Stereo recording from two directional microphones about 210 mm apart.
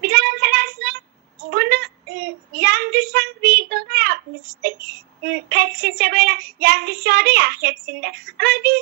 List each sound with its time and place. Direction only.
0.0 s child singing: 50° right (ahead or behind)